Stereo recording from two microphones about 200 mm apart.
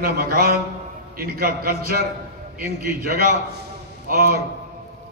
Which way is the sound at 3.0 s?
50° right (ahead or behind).